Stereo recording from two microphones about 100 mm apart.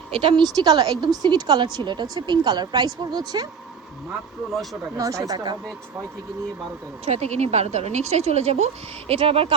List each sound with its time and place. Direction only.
0.1 s speech: 60° right (ahead or behind)
0.4 s a woman's voice: 40° right (ahead or behind)
4.9 s speech: 35° right (ahead or behind)
7.0 s speech: 90° right; by 9.6 s 70° right (ahead or behind)